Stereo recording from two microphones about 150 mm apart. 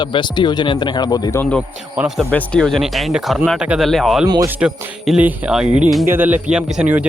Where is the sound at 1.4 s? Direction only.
10° left (ahead or behind).